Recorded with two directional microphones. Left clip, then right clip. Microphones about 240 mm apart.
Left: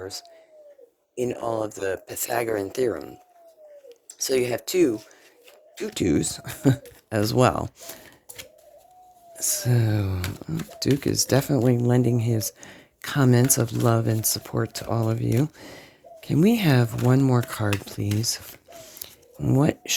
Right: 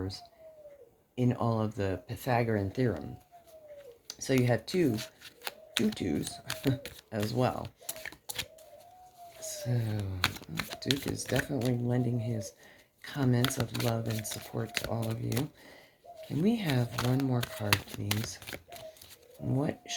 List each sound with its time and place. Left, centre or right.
1.1 s speech: left
4.2 s speech: left
6.0 s speech: left
9.5 s speech: left
19.5 s speech: left